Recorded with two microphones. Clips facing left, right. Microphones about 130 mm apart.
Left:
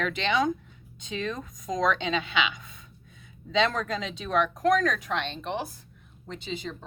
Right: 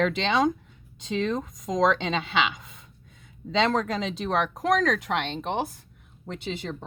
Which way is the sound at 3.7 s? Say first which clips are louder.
Right 5 dB; 90° right.